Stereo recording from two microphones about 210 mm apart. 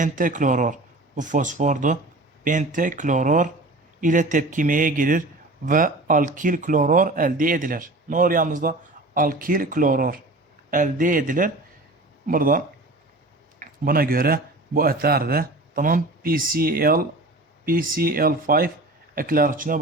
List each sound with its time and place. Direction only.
0.0 s speech: 40° right (ahead or behind)